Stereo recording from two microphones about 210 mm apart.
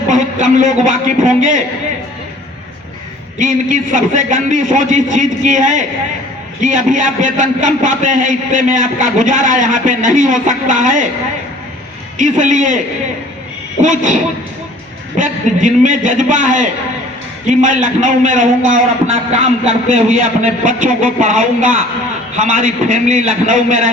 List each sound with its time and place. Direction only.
0.1 s a sound: 35° right (ahead or behind)
0.9 s a man's voice: 40° right (ahead or behind)
3.3 s a man's voice: 40° right (ahead or behind)
12.1 s a man's voice: 35° right (ahead or behind)
13.8 s a man's voice: 35° right (ahead or behind)
15.2 s a man's voice: 40° right (ahead or behind)